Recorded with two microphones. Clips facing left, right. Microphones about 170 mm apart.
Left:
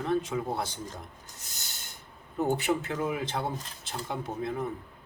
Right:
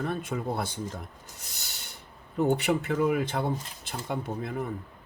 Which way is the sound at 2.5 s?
65° right (ahead or behind).